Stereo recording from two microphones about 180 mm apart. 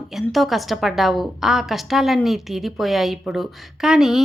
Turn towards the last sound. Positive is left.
turn(degrees=0)  # may be behind; listen again after turning